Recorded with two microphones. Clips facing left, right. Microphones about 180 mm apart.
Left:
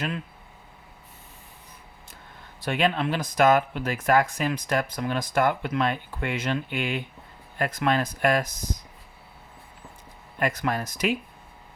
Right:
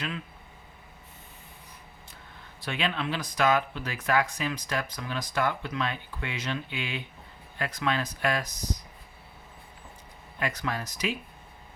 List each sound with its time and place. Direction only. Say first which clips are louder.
2.6 s speech: left 6 dB; 50° left (ahead or behind)
10.4 s speech: left 5 dB; 50° left (ahead or behind)